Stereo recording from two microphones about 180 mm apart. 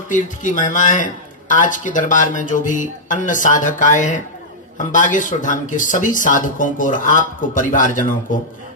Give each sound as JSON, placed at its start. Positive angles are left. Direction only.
{"t": 0.1, "sound": "speech", "side_deg": 45}